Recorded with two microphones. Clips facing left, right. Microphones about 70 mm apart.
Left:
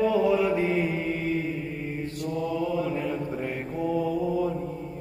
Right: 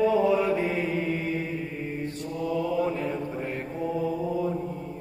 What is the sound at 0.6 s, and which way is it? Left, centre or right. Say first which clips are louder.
Mantra: left 1 dB; centre.